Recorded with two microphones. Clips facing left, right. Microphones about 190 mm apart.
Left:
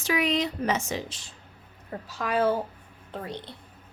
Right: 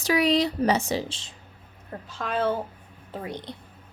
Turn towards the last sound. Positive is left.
turn(degrees=-15)  # may be behind; listen again after turning